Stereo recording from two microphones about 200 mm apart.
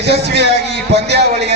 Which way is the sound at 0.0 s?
55° right (ahead or behind).